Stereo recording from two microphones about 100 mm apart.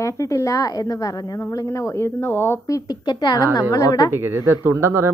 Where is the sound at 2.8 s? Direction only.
45° left (ahead or behind).